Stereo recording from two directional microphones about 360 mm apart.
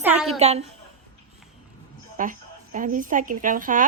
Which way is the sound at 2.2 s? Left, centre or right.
Right.